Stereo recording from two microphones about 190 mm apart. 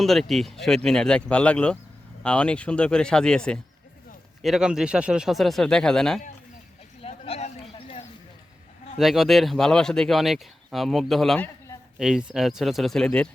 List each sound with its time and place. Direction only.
0.0 s speech: centre (ahead or behind)
7.0 s a sound: 35° left (ahead or behind)
9.0 s speech: centre (ahead or behind)